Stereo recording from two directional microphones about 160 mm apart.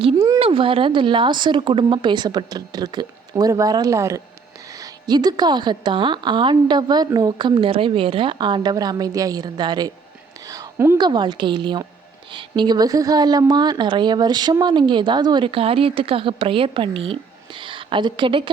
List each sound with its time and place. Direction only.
0.3 s a woman's voice: 35° right (ahead or behind)
10.4 s a sound: 20° right (ahead or behind)
10.9 s a woman's voice: 25° right (ahead or behind)